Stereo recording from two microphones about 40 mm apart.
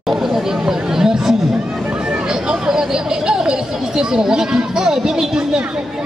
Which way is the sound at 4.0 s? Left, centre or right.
Centre.